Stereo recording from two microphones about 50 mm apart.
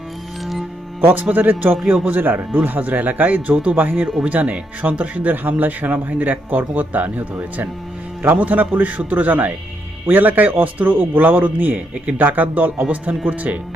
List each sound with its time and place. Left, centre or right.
1.0 s speech: right